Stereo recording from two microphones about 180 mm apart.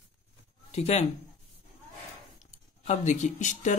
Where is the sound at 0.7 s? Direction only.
40° left (ahead or behind).